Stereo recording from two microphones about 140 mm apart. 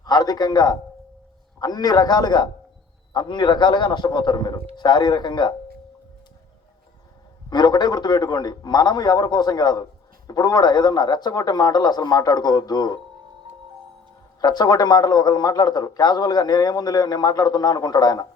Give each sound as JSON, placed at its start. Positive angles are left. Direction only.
{"t": 0.0, "sound": "a man's voice", "side_deg": 30}
{"t": 7.5, "sound": "a man's voice", "side_deg": 30}
{"t": 14.4, "sound": "a man's voice", "side_deg": 30}